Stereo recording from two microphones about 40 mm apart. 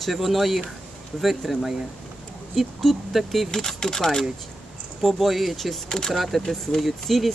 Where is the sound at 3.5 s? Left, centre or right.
Centre.